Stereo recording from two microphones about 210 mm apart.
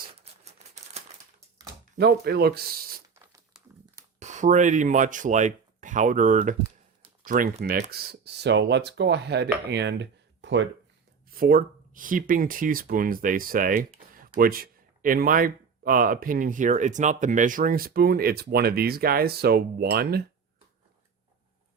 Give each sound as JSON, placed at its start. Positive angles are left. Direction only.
{"t": 0.4, "sound": "typewriter", "side_deg": -30}
{"t": 2.0, "sound": "speech", "side_deg": -50}
{"t": 4.2, "sound": "speech", "side_deg": -35}
{"t": 11.3, "sound": "speech", "side_deg": -45}